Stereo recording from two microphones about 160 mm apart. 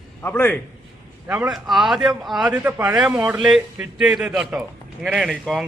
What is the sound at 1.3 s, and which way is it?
A man's voice, 5° right (ahead or behind).